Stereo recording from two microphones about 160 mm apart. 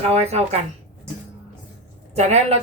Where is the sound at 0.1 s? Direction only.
40° right (ahead or behind).